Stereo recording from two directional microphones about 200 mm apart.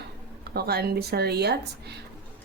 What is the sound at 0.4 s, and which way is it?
Speech, 50° right (ahead or behind).